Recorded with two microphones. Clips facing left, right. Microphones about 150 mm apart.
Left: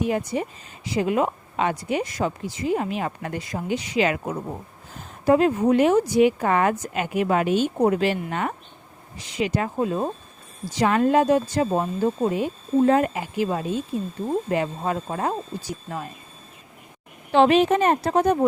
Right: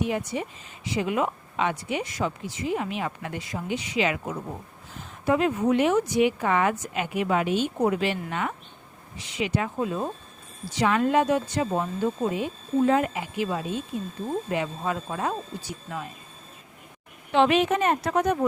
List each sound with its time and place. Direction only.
0.0 s speech: 40° left (ahead or behind)
12.4 s speech: 40° left (ahead or behind)
17.3 s speech: 35° left (ahead or behind)